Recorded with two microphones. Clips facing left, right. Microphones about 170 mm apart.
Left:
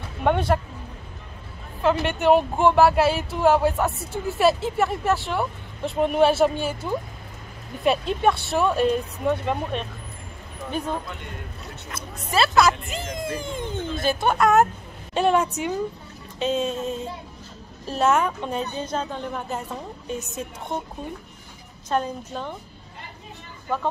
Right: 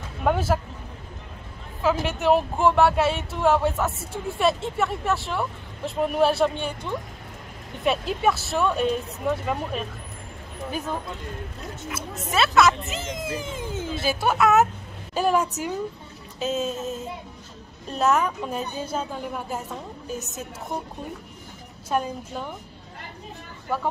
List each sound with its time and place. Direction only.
0.2 s a sound: centre (ahead or behind)
1.8 s speech: centre (ahead or behind)
11.9 s speech: centre (ahead or behind)
21.8 s a woman's voice: 10° right (ahead or behind)